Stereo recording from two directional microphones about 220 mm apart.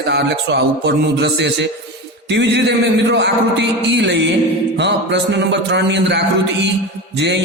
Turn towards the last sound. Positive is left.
turn(degrees=-50)  # may be behind; listen again after turning